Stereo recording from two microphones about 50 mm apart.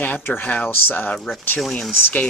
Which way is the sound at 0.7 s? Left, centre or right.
Left.